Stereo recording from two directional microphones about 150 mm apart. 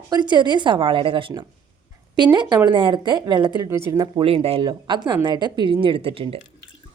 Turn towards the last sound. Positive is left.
turn(degrees=-40)  # may be behind; listen again after turning